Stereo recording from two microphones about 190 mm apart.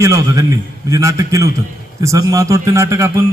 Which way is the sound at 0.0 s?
15° right (ahead or behind).